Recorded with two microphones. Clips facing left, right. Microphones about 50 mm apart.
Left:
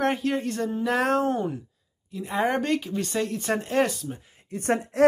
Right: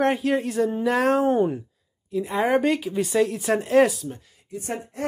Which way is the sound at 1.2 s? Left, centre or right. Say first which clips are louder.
Right 5 dB; centre.